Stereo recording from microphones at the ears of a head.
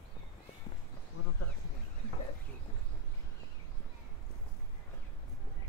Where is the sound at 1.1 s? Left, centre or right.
Left.